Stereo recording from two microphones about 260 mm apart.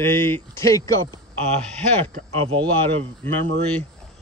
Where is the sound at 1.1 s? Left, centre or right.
Right.